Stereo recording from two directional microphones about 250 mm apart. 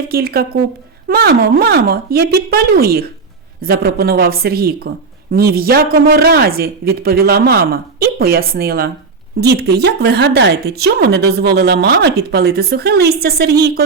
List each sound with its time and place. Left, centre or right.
0.1 s speech: right